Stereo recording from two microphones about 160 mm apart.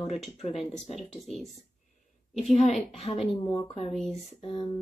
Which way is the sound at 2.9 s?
40° left (ahead or behind).